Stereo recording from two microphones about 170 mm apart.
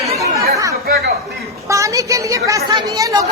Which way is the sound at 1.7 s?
20° right (ahead or behind).